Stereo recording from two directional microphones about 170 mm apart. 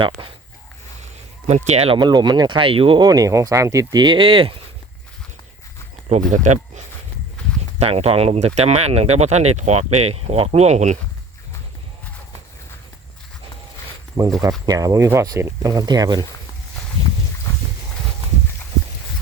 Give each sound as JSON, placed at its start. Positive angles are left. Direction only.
{"t": 0.2, "sound": "a sound", "side_deg": -30}
{"t": 1.5, "sound": "speech", "side_deg": -40}
{"t": 6.3, "sound": "speech", "side_deg": -45}
{"t": 14.2, "sound": "speech", "side_deg": -20}